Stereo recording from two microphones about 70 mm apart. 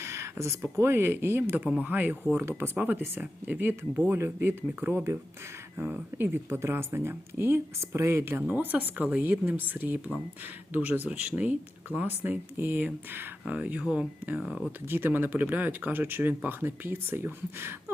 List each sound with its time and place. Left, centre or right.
0.0 s speech: right; by 14.6 s centre
14.8 s speech: right